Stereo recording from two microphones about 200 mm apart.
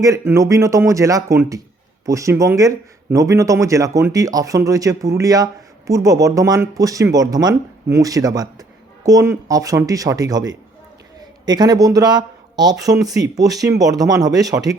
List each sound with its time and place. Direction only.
0.0 s speech: 15° right (ahead or behind)